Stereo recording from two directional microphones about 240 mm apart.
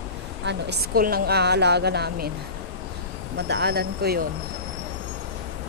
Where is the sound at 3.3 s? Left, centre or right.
Right.